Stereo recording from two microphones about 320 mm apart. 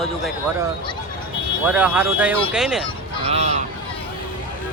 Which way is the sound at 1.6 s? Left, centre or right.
Centre.